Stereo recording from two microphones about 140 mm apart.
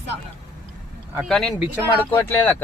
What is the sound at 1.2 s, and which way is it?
Speech, 5° left (ahead or behind).